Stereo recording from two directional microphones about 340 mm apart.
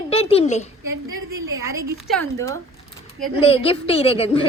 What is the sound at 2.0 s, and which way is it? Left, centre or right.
Speech, centre.